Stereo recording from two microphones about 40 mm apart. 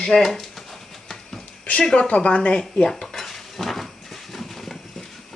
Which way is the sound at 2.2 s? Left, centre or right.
Left.